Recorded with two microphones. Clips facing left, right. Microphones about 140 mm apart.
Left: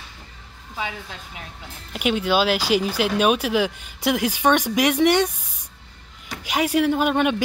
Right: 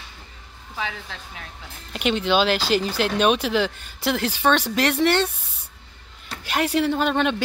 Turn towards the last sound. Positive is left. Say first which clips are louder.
# left 2 dB
turn(degrees=10)  # may be behind; listen again after turning